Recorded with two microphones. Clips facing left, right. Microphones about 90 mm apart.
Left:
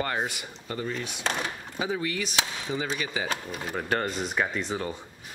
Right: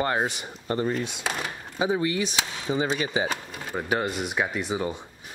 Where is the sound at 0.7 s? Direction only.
45° right (ahead or behind).